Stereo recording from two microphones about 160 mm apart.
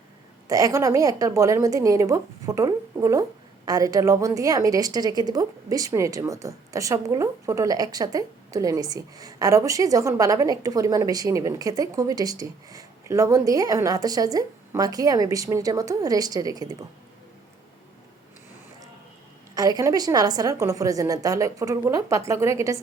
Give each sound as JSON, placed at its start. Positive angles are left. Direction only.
{"t": 0.4, "sound": "a woman's voice", "side_deg": -20}
{"t": 19.5, "sound": "a woman's voice", "side_deg": -25}